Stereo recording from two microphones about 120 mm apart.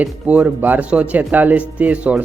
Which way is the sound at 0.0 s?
10° right (ahead or behind).